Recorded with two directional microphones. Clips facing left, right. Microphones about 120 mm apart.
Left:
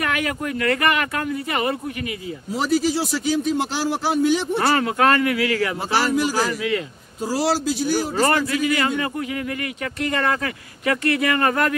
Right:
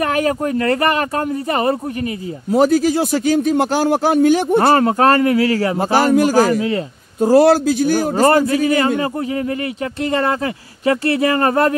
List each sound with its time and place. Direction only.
0.0 s speech: 35° right (ahead or behind)
2.5 s a man's voice: 50° right (ahead or behind)
7.2 s a man's voice: 55° right (ahead or behind)
8.3 s speech: 40° right (ahead or behind)
10.1 s speech: 30° right (ahead or behind)